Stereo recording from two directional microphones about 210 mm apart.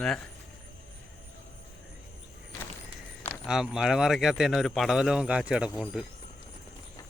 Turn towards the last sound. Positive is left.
turn(degrees=-5)  # may be behind; listen again after turning